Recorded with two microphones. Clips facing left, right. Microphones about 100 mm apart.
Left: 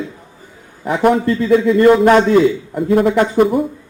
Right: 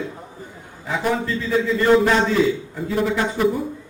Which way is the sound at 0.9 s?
55° left (ahead or behind).